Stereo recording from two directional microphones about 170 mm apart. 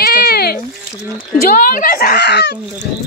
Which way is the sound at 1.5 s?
50° left (ahead or behind).